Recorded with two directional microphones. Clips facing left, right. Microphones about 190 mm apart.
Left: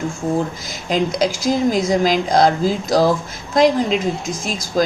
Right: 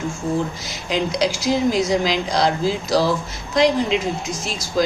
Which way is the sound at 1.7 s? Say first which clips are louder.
Left 3 dB; 45° left (ahead or behind).